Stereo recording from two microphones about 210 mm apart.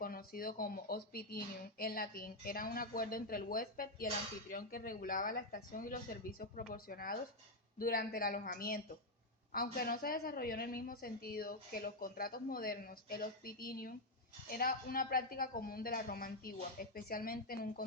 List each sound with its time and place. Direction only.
0.0 s speech: 45° left (ahead or behind)